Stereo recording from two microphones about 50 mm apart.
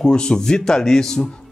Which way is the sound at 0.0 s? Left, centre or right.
Centre.